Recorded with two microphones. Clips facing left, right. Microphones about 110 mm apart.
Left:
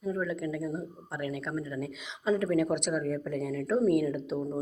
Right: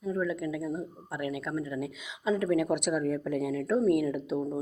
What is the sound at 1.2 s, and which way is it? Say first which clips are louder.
Speech: right 1 dB; 45° left (ahead or behind).